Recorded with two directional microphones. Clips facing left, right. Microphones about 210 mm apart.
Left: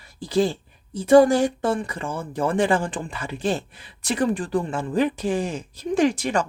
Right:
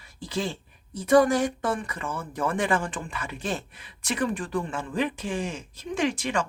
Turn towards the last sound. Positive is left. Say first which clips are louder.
# left 6 dB
turn(degrees=40)  # may be behind; listen again after turning